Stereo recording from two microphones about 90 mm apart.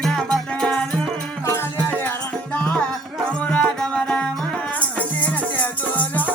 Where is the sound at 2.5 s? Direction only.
15° left (ahead or behind).